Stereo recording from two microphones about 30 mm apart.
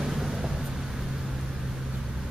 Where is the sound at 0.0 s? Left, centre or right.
Centre.